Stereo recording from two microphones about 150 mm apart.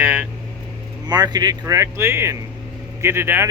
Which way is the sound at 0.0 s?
10° right (ahead or behind).